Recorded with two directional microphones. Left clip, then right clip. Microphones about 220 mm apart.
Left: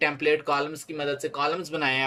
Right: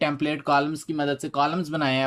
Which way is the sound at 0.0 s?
35° right (ahead or behind).